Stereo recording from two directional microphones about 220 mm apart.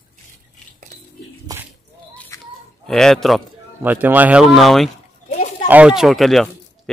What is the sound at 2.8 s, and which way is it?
A man's voice, centre (ahead or behind).